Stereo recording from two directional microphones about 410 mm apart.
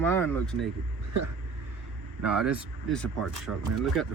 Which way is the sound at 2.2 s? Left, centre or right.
Centre.